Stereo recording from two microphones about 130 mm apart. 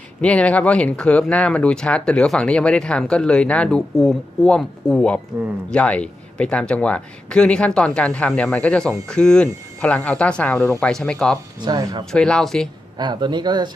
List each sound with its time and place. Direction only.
0.2 s speech: 10° left (ahead or behind)
11.6 s speech: 30° right (ahead or behind)
12.1 s speech: 5° left (ahead or behind)
13.0 s speech: 35° right (ahead or behind)